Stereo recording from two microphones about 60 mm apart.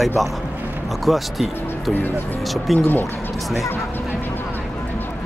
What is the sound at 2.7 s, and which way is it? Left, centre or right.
Speech, left.